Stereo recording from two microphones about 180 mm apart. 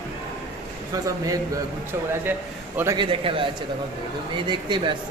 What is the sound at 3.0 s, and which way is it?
Speech, 30° right (ahead or behind).